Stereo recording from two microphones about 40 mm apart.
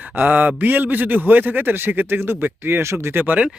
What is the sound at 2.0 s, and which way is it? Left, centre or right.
Speech, right.